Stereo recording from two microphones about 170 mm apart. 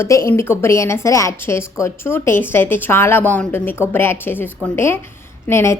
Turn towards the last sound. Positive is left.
turn(degrees=15)  # may be behind; listen again after turning